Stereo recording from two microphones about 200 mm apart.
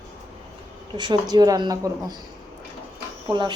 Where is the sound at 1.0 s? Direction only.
20° right (ahead or behind).